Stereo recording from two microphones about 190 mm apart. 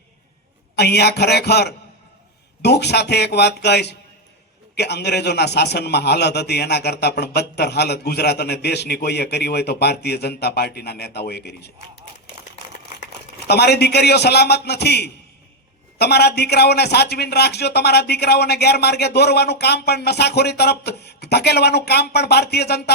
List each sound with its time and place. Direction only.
0.8 s a man's voice: 60° left (ahead or behind)
13.5 s a man's voice: 60° left (ahead or behind)